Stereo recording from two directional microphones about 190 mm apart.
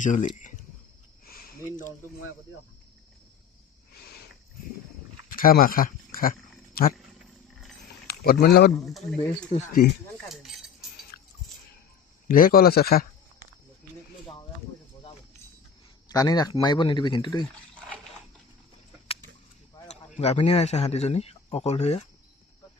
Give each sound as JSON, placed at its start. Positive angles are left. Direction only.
{"t": 0.0, "sound": "speech", "side_deg": 40}
{"t": 1.2, "sound": "a sound", "side_deg": 45}
{"t": 5.3, "sound": "speech", "side_deg": 50}
{"t": 8.0, "sound": "speech", "side_deg": 55}
{"t": 8.7, "sound": "speech", "side_deg": 0}
{"t": 9.5, "sound": "speech", "side_deg": 40}
{"t": 10.2, "sound": "chink", "side_deg": 0}
{"t": 12.3, "sound": "speech", "side_deg": 50}
{"t": 16.0, "sound": "speech", "side_deg": 20}
{"t": 20.1, "sound": "speech", "side_deg": 35}